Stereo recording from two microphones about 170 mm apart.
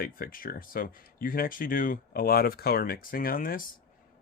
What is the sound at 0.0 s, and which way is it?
Speech, 55° left (ahead or behind).